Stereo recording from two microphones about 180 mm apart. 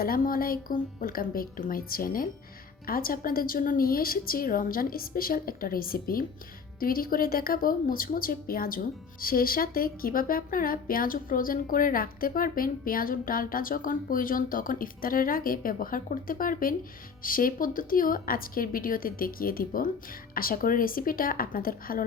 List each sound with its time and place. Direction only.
0.0 s a woman's voice: 55° left (ahead or behind)